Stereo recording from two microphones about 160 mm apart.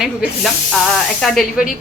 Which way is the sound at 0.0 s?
Centre (ahead or behind).